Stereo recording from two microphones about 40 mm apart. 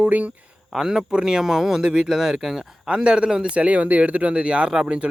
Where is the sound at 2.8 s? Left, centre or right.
Right.